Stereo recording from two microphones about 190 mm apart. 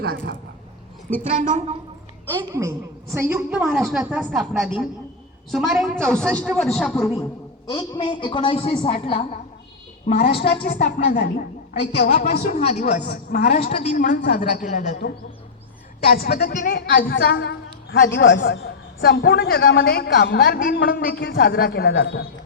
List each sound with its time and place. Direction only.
1.3 s a woman's voice: 40° right (ahead or behind)
2.4 s a woman's voice: 15° right (ahead or behind)
3.6 s a woman's voice: centre (ahead or behind)
7.0 s a man's voice: 15° left (ahead or behind)
10.1 s a woman's voice: 50° left (ahead or behind)
12.3 s a woman's voice: 35° left (ahead or behind)
16.1 s a woman's voice: 50° left (ahead or behind); by 22.3 s 65° left (ahead or behind)